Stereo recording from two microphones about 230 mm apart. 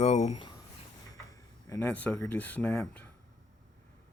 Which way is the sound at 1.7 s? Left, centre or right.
Centre.